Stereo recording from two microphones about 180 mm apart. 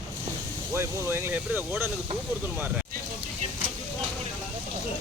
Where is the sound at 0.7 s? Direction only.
15° right (ahead or behind).